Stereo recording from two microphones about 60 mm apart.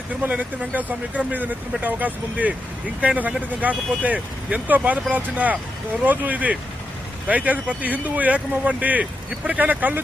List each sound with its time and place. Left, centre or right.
0.2 s speech: right